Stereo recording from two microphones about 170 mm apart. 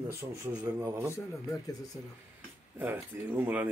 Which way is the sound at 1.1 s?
20° left (ahead or behind).